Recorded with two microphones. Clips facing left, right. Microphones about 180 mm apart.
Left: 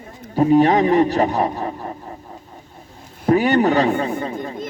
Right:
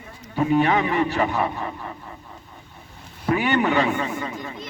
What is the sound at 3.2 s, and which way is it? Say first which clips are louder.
A man's voice: left 6 dB; 40° left (ahead or behind).